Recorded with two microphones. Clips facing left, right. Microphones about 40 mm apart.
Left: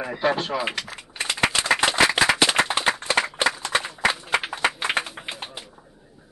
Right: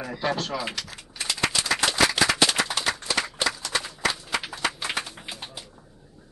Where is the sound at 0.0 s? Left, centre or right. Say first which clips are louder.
Left 4 dB; left.